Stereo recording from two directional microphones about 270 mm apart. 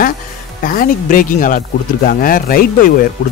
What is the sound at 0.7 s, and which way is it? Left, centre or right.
Speech, left.